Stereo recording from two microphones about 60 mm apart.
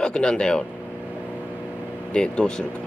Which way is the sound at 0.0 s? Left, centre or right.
Centre.